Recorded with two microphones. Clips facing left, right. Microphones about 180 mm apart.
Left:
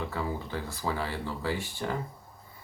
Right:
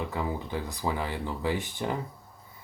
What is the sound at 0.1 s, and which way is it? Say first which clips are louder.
Speech: right 2 dB; 20° right (ahead or behind).